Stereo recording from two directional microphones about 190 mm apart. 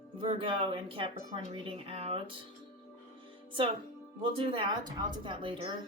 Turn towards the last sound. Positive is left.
turn(degrees=-25)  # may be behind; listen again after turning